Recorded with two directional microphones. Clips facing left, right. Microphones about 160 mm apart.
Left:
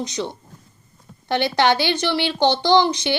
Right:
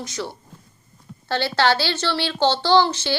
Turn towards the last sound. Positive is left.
turn(degrees=15)  # may be behind; listen again after turning